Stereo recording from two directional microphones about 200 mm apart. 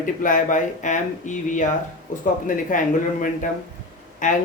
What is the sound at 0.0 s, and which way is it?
Speech, 40° left (ahead or behind).